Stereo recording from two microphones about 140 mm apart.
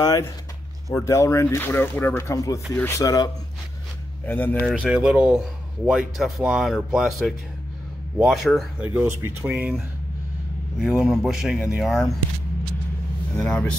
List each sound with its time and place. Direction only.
0.0 s speech: 20° left (ahead or behind)
4.3 s speech: 15° left (ahead or behind)
4.7 s speech: 5° right (ahead or behind)
8.8 s speech: 15° right (ahead or behind)
10.8 s speech: 5° right (ahead or behind)
13.4 s speech: 5° left (ahead or behind)